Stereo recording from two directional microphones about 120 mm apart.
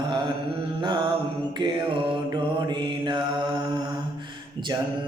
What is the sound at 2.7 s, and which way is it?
Mantra, 40° right (ahead or behind).